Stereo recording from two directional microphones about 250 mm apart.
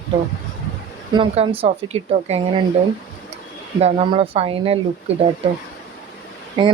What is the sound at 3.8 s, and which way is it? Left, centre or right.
Speech, right.